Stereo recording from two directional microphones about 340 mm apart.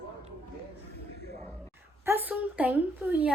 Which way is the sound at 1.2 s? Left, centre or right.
Right.